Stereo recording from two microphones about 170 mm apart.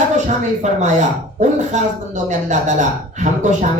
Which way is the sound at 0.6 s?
45° right (ahead or behind).